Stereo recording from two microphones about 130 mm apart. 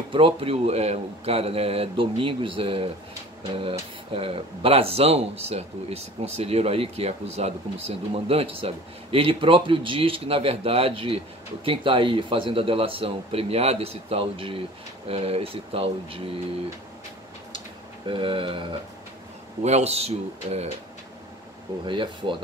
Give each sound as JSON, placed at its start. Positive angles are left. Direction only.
{"t": 0.1, "sound": "speech", "side_deg": -45}
{"t": 4.1, "sound": "speech", "side_deg": -45}
{"t": 18.0, "sound": "speech", "side_deg": -40}
{"t": 19.6, "sound": "a man's voice", "side_deg": -55}
{"t": 21.8, "sound": "speech", "side_deg": -40}